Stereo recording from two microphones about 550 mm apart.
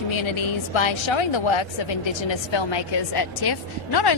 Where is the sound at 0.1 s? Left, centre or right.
Left.